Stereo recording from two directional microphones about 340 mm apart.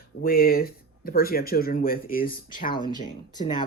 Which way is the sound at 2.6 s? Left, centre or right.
Centre.